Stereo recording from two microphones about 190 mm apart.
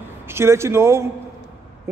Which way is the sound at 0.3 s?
15° right (ahead or behind).